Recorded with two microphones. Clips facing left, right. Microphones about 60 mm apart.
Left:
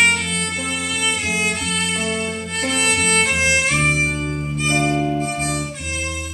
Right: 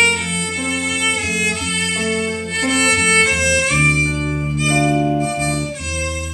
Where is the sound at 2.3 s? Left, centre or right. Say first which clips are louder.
Right 4 dB; centre.